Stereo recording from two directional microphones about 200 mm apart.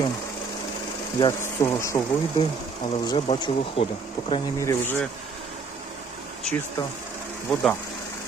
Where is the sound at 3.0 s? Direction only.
20° left (ahead or behind).